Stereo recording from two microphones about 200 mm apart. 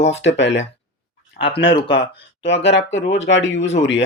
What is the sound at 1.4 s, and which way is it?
Speech, 45° left (ahead or behind).